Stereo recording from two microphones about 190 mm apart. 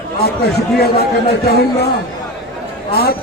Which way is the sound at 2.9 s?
55° left (ahead or behind).